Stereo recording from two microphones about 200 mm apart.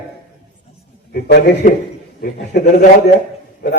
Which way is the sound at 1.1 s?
45° left (ahead or behind).